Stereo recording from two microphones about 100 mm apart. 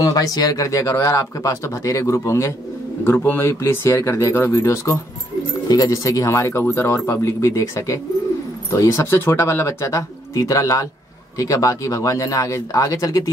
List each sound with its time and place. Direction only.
0.0 s speech: 40° left (ahead or behind)